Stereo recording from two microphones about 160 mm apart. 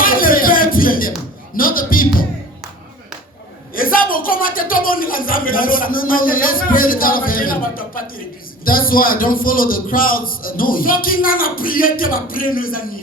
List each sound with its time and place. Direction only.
0.0 s music: 60° left (ahead or behind)
1.5 s speech: 60° left (ahead or behind)
3.8 s speech: 65° left (ahead or behind)